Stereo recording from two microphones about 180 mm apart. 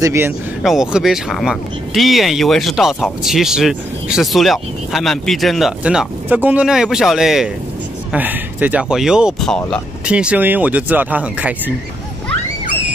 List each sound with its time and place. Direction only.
0.0 s speech: 15° right (ahead or behind)
0.6 s speech: centre (ahead or behind)